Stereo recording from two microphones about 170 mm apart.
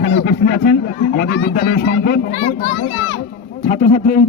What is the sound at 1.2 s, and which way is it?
A man's voice, 70° left (ahead or behind).